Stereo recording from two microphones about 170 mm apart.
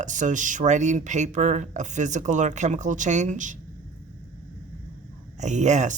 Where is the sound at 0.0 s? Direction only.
45° right (ahead or behind).